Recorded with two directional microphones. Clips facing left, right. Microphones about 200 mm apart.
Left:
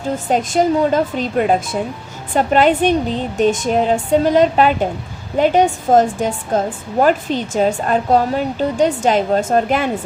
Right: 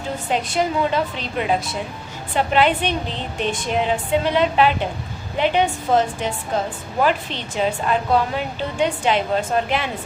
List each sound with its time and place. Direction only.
0.3 s a woman's voice: 45° left (ahead or behind)